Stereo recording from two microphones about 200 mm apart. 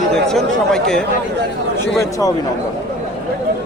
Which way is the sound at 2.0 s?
15° left (ahead or behind).